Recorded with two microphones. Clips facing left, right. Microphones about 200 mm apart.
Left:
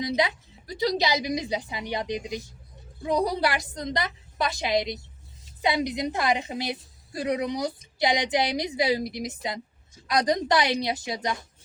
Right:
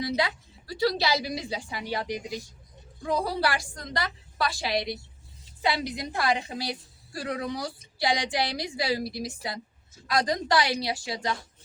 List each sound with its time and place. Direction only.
0.0 s a woman's voice: 20° left (ahead or behind)